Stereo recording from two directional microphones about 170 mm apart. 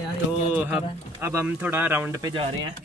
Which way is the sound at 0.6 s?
10° right (ahead or behind).